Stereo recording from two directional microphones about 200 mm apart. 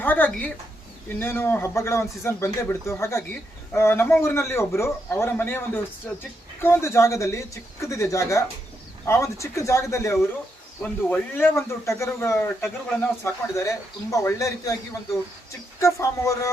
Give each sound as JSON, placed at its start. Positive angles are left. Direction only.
{"t": 0.0, "sound": "speech", "side_deg": 10}
{"t": 16.0, "sound": "speech", "side_deg": 15}